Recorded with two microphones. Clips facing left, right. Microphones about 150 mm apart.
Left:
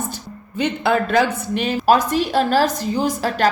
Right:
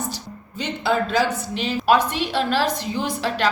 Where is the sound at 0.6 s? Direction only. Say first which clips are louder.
Left 4 dB; 55° left (ahead or behind).